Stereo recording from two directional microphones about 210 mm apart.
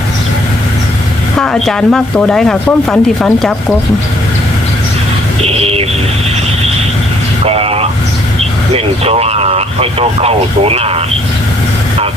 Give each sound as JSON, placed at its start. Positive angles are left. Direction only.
{"t": 1.4, "sound": "speech", "side_deg": 0}
{"t": 5.4, "sound": "music", "side_deg": -30}
{"t": 7.4, "sound": "vehicle", "side_deg": -30}
{"t": 8.7, "sound": "speech", "side_deg": -30}